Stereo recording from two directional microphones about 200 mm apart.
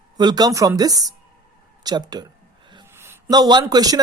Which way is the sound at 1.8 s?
20° right (ahead or behind).